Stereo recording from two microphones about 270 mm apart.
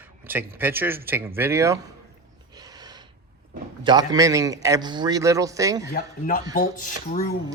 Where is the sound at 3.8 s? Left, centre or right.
Centre.